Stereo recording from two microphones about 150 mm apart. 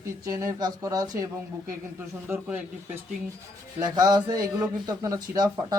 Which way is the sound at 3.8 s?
25° right (ahead or behind).